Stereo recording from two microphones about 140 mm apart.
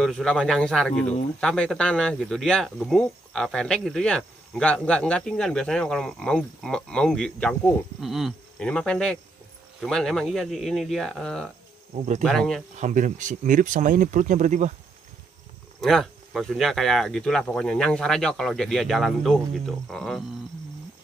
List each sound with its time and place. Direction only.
0.0 s speech: 5° left (ahead or behind)
8.0 s a sound: centre (ahead or behind)
8.6 s speech: 5° left (ahead or behind)
12.8 s speech: 65° right (ahead or behind)
15.8 s speech: 5° left (ahead or behind)